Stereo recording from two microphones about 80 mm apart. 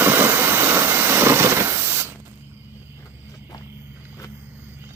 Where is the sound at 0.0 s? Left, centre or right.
Right.